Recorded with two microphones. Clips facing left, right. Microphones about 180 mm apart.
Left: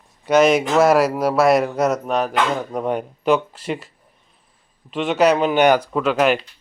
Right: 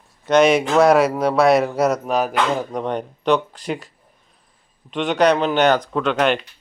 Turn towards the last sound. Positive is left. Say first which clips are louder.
# left 1 dB
turn(degrees=5)  # may be behind; listen again after turning